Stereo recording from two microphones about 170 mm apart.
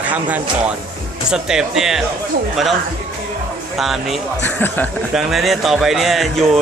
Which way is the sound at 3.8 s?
Centre (ahead or behind).